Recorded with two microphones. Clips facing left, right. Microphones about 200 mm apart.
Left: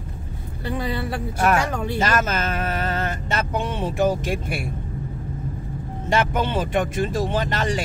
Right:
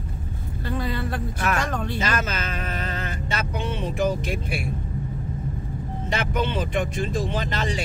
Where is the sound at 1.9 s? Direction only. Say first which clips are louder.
Left 8 dB; 45° left (ahead or behind).